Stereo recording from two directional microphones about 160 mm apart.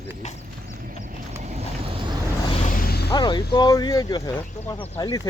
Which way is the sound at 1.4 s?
45° right (ahead or behind).